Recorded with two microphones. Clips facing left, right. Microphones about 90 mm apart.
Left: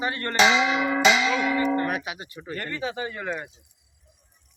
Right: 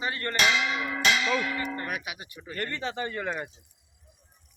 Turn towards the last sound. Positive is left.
turn(degrees=5)  # may be behind; listen again after turning